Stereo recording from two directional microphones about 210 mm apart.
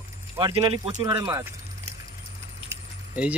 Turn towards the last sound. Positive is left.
turn(degrees=-5)  # may be behind; listen again after turning